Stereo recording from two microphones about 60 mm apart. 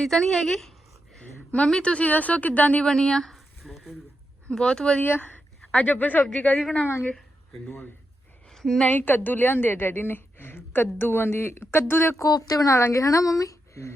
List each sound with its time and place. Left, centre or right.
0.0 s speech: centre
1.2 s a woman's voice: left
2.8 s a sound: centre
4.4 s speech: centre
4.9 s a woman's voice: left
8.4 s a sound: centre
8.9 s a woman's voice: left
12.1 s speech: left
12.9 s speech: left